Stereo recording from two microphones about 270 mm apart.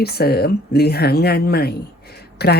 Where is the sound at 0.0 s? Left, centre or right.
Left.